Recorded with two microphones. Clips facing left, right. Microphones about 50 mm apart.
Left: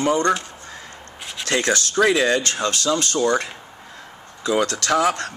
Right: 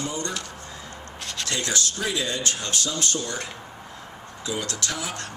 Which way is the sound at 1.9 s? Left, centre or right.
Left.